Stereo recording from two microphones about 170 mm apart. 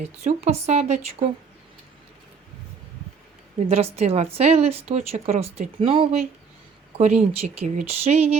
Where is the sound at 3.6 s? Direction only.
35° right (ahead or behind).